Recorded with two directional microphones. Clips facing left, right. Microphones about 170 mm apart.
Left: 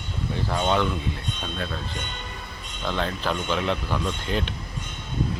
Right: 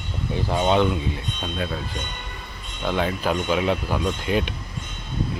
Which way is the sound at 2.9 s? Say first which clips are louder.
Right 4 dB; 10° right (ahead or behind).